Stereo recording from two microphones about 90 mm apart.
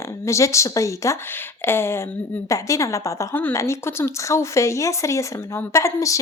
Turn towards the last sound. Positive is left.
turn(degrees=35)  # may be behind; listen again after turning